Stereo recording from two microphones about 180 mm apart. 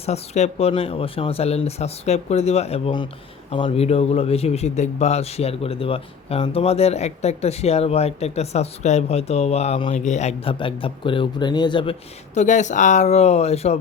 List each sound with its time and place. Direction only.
0.0 s a man's voice: 40° left (ahead or behind)